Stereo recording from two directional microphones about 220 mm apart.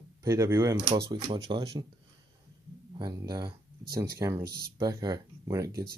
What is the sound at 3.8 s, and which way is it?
Speech, 45° right (ahead or behind).